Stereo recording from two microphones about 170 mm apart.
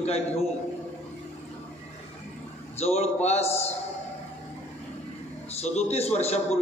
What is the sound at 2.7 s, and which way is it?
A man's voice, 40° left (ahead or behind).